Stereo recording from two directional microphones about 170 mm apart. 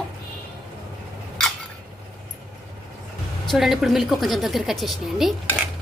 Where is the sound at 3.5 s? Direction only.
Centre (ahead or behind).